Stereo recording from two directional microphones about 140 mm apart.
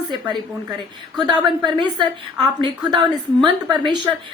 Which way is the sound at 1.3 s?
35° right (ahead or behind).